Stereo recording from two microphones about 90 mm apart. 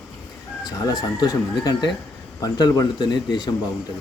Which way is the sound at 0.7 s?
45° left (ahead or behind).